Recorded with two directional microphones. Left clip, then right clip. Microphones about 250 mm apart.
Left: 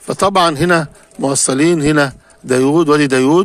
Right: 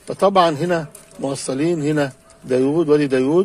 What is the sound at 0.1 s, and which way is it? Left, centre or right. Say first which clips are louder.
A man's voice: left 2 dB; left.